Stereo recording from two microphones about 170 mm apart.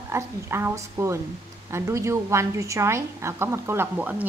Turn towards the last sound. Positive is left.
turn(degrees=-10)  # may be behind; listen again after turning